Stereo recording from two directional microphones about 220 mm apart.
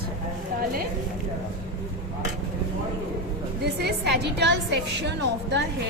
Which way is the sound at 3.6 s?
50° right (ahead or behind).